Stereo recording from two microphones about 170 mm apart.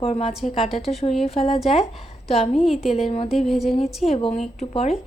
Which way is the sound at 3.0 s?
35° left (ahead or behind).